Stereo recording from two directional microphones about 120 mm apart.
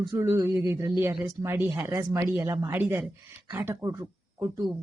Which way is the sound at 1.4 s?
20° right (ahead or behind).